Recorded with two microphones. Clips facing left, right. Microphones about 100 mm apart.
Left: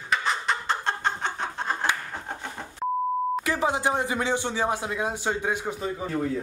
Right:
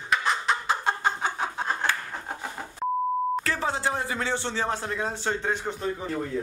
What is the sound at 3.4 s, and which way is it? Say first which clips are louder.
Speech: left 3 dB; 15° left (ahead or behind).